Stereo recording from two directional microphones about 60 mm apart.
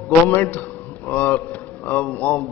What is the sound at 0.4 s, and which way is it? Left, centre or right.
A man's voice, left.